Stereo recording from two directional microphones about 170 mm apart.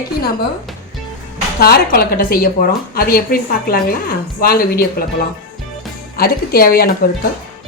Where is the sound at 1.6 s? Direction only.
65° left (ahead or behind).